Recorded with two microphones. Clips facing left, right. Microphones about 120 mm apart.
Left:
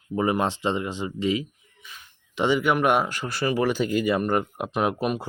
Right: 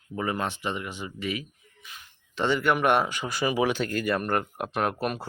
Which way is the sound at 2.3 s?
10° left (ahead or behind).